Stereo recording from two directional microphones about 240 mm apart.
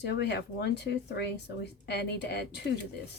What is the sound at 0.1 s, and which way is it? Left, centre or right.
Speech, left.